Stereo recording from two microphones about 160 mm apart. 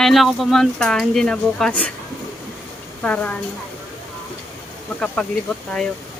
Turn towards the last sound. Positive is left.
turn(degrees=5)  # may be behind; listen again after turning